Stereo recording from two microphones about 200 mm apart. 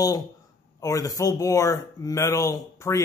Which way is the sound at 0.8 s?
15° left (ahead or behind).